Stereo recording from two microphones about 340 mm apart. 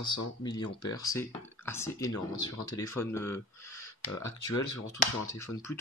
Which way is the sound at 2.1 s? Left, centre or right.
Left.